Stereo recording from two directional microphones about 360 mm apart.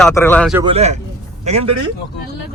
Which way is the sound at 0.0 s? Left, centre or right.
Centre.